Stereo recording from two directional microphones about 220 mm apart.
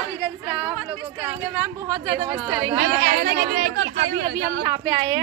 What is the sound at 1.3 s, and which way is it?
A woman's voice, 15° right (ahead or behind).